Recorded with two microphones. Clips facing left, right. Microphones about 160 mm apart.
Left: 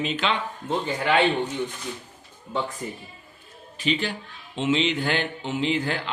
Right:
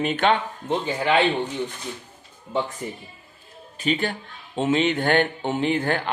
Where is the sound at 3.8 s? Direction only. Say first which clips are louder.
Right 2 dB; 50° right (ahead or behind).